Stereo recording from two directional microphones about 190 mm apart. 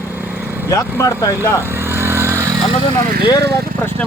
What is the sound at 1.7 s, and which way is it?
Vehicle, 10° right (ahead or behind).